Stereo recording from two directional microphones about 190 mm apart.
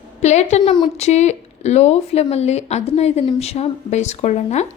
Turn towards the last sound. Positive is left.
turn(degrees=35)  # may be behind; listen again after turning